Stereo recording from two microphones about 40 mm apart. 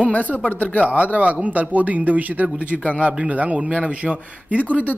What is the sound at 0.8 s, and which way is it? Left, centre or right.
A man's voice, right.